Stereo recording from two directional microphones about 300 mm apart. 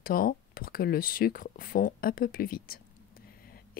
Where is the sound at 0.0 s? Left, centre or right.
Left.